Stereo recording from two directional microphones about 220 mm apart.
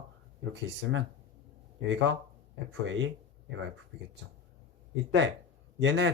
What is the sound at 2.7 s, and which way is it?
Speech, 55° right (ahead or behind).